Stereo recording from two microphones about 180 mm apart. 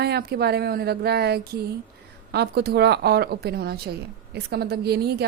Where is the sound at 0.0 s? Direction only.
65° right (ahead or behind).